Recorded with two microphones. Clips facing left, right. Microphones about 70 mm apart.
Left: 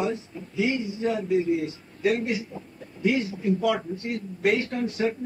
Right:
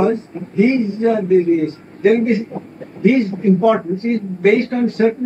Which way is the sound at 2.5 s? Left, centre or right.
Right.